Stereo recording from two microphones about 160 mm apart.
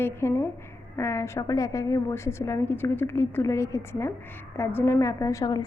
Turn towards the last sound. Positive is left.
turn(degrees=25)  # may be behind; listen again after turning